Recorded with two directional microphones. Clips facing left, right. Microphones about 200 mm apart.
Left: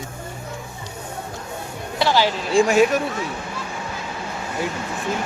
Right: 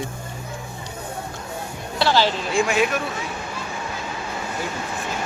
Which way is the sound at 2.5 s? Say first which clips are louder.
Left 7 dB; 35° left (ahead or behind).